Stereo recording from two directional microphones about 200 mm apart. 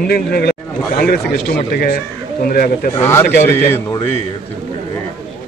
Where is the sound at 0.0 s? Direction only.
50° left (ahead or behind).